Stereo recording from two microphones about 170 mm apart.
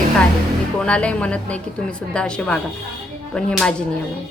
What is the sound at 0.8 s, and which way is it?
A woman's voice, 5° left (ahead or behind).